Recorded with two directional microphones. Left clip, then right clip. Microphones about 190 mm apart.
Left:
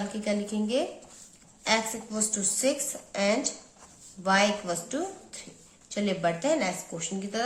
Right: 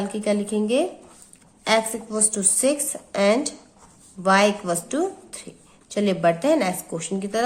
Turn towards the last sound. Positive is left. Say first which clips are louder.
# right 7 dB
turn(degrees=-45)  # may be behind; listen again after turning